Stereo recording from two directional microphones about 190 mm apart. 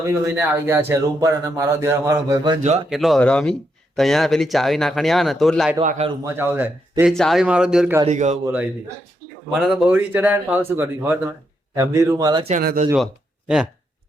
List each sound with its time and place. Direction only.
0.0 s speech: 10° right (ahead or behind)
2.6 s a man's voice: 35° right (ahead or behind)
2.9 s speech: centre (ahead or behind)
5.8 s a man's voice: 40° right (ahead or behind)
6.2 s speech: 10° right (ahead or behind)
7.1 s speech: centre (ahead or behind)
8.0 s a man's voice: 40° right (ahead or behind)
8.4 s speech: 10° right (ahead or behind)
12.5 s speech: 45° right (ahead or behind)